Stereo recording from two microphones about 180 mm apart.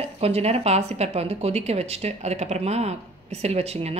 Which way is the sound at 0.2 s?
35° right (ahead or behind).